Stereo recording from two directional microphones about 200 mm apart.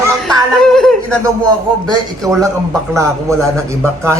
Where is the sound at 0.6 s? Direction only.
Centre (ahead or behind).